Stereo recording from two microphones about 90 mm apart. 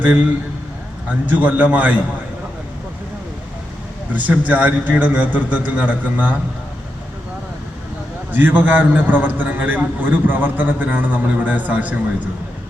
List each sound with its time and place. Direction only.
1.3 s a man's voice: 15° right (ahead or behind)
4.1 s a man's voice: 20° right (ahead or behind)
8.3 s a man's voice: 20° right (ahead or behind)